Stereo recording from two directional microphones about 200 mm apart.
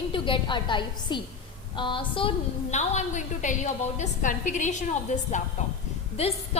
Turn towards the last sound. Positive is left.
turn(degrees=30)  # may be behind; listen again after turning